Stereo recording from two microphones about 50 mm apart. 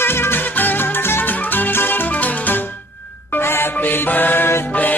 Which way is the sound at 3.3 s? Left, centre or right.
Left.